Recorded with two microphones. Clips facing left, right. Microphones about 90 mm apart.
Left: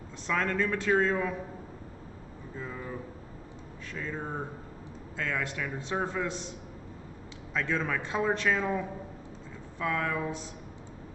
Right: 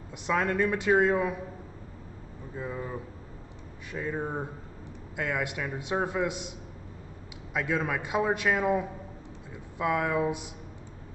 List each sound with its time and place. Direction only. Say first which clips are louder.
0.3 s a man's voice: right 3 dB; 15° right (ahead or behind)
2.5 s a man's voice: right 3 dB; 20° right (ahead or behind)
7.5 s a man's voice: right 1 dB; 10° right (ahead or behind)